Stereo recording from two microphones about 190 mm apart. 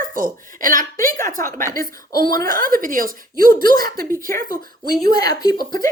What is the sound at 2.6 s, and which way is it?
Speech, 45° right (ahead or behind).